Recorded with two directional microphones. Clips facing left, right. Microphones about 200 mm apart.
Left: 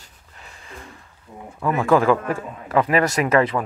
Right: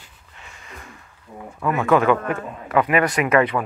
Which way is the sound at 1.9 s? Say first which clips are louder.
Even; 30° left (ahead or behind).